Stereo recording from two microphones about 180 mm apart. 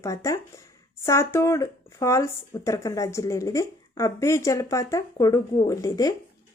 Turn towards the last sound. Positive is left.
turn(degrees=20)  # may be behind; listen again after turning